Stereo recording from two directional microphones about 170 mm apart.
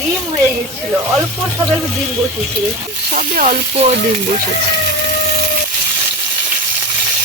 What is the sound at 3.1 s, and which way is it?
Speech, 45° right (ahead or behind).